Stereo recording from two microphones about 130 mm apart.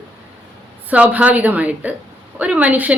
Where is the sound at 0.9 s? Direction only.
10° right (ahead or behind).